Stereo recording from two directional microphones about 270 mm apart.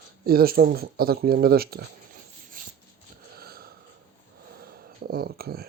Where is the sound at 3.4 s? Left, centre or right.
Right.